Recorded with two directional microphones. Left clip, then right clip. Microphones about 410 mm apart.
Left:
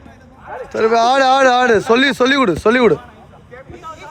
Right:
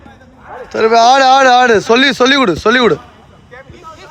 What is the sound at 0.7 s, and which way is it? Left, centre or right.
Speech, centre.